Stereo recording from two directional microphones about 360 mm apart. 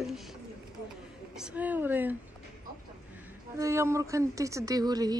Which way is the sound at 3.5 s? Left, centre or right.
Centre.